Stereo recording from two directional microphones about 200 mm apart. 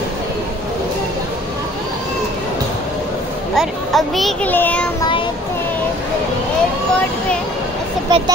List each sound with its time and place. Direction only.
3.5 s a child's voice: centre (ahead or behind)
8.1 s speech: 25° right (ahead or behind)